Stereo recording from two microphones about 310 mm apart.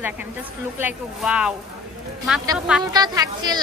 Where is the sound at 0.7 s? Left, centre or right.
Centre.